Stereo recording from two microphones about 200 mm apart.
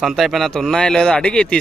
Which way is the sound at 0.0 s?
Centre (ahead or behind).